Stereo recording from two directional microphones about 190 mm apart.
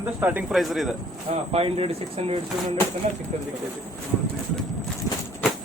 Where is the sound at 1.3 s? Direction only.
30° right (ahead or behind).